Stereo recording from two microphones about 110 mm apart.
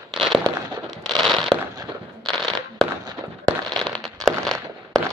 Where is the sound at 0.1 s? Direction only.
Centre (ahead or behind).